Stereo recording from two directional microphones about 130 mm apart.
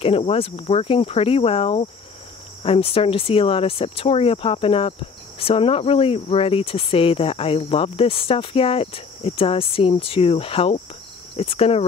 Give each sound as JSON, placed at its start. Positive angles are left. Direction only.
{"t": 0.0, "sound": "speech", "side_deg": 50}